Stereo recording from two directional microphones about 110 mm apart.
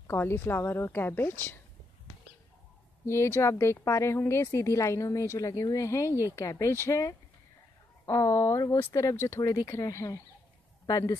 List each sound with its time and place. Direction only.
0.0 s speech: 20° left (ahead or behind)
3.1 s speech: 25° left (ahead or behind)